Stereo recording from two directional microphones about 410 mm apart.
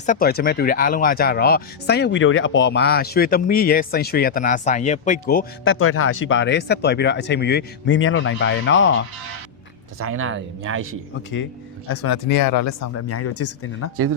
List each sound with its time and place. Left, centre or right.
0.0 s speech: centre
10.0 s speech: right
11.9 s speech: left
12.3 s speech: left